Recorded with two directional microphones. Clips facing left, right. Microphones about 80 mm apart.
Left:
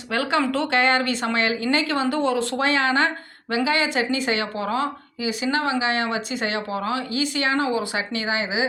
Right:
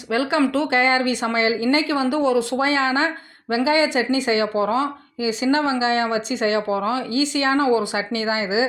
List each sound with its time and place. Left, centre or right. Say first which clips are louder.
0.1 s speech: right 3 dB; centre; by 8.6 s right